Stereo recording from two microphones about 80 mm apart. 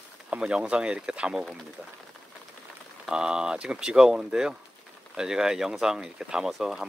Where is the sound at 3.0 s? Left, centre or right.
Centre.